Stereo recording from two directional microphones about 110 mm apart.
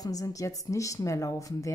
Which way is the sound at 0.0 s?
35° left (ahead or behind).